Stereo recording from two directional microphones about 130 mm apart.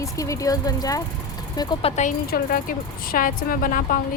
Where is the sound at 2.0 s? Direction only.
90° left.